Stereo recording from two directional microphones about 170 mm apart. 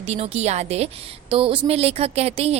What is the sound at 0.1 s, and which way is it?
A woman's voice, 40° right (ahead or behind).